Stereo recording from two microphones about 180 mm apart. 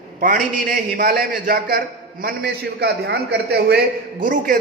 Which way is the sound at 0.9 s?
55° right (ahead or behind).